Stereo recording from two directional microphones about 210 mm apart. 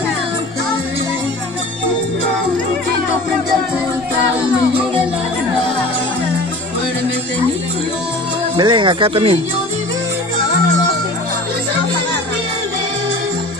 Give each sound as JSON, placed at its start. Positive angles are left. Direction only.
{"t": 8.5, "sound": "speech", "side_deg": -20}